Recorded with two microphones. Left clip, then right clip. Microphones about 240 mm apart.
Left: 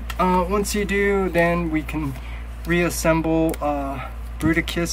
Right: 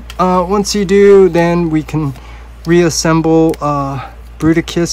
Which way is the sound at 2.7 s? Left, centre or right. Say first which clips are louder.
Right 9 dB; right.